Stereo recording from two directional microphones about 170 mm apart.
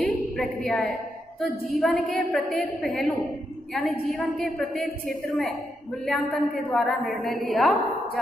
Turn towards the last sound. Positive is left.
turn(degrees=0)  # may be behind; listen again after turning